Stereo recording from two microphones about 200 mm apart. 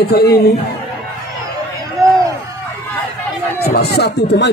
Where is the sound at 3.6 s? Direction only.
55° left (ahead or behind).